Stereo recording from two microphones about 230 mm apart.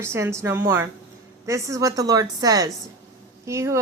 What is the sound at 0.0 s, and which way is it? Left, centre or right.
A woman's voice, centre.